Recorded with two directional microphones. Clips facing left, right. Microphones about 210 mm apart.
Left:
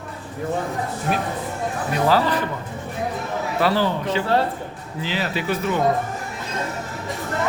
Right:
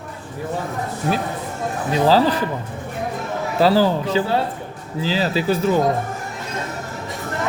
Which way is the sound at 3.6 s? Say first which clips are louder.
Right 5 dB; 35° right (ahead or behind).